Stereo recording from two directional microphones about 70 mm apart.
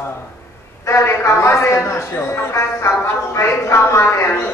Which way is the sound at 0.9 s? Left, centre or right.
Left.